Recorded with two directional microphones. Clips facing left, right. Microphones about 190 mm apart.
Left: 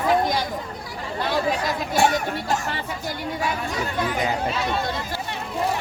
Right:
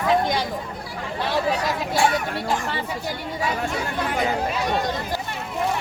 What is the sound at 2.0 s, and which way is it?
Speech, 40° left (ahead or behind).